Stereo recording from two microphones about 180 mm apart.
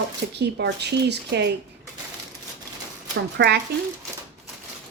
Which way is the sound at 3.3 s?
65° right (ahead or behind).